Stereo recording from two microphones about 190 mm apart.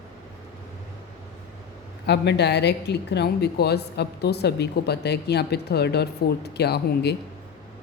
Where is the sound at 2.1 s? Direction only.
60° left (ahead or behind).